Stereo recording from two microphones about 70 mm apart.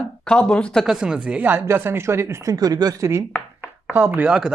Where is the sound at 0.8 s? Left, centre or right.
Centre.